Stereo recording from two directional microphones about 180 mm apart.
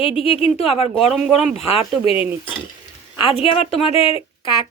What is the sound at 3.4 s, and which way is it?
Speech, 30° left (ahead or behind).